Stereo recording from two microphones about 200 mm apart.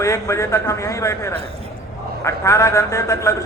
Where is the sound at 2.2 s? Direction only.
15° left (ahead or behind).